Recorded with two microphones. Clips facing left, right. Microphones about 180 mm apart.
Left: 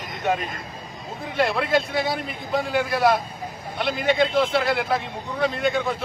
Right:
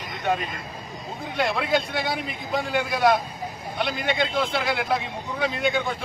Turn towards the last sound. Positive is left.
turn(degrees=0)  # may be behind; listen again after turning